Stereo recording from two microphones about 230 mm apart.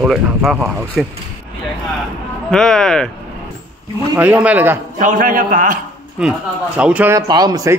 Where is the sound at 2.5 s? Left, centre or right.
Centre.